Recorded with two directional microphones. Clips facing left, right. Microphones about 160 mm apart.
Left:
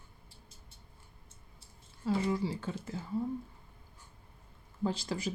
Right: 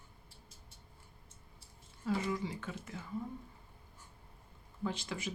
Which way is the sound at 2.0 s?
30° left (ahead or behind).